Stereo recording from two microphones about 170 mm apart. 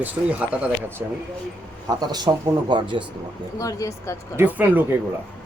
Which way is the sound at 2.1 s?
25° right (ahead or behind).